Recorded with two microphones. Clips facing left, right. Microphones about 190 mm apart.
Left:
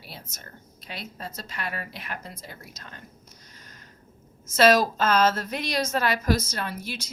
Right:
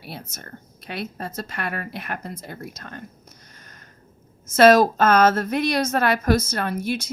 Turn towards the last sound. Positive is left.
turn(degrees=-55)  # may be behind; listen again after turning